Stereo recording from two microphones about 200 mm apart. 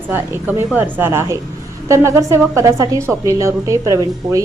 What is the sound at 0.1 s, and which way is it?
A woman's voice, 10° right (ahead or behind).